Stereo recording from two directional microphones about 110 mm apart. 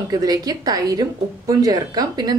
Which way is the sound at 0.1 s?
35° right (ahead or behind).